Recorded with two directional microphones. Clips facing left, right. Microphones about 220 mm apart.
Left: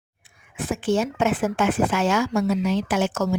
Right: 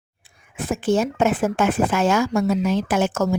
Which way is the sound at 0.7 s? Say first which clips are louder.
Right 2 dB; 40° right (ahead or behind).